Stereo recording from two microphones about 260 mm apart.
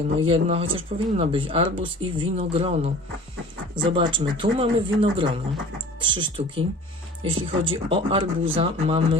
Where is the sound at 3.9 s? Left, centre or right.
Centre.